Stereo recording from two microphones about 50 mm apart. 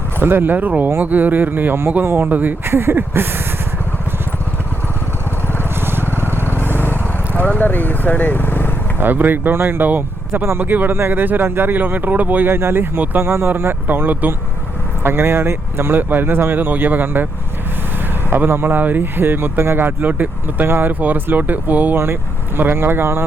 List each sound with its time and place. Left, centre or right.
0.2 s speech: right
2.6 s speech: right
6.1 s vehicle: right
6.6 s vehicle: left
9.0 s speech: right
15.0 s speech: right
18.3 s speech: right
21.9 s speech: right